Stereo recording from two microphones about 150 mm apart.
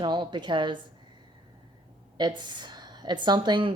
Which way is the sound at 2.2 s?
30° right (ahead or behind).